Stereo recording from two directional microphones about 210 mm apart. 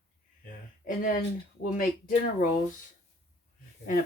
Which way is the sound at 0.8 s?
40° left (ahead or behind).